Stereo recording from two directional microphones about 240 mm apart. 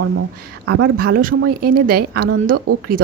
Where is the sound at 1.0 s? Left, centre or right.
Right.